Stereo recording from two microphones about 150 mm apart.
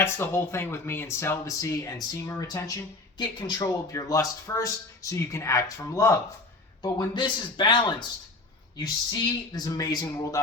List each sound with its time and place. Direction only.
0.0 s speech: 15° left (ahead or behind)
6.8 s a man's voice: 30° left (ahead or behind)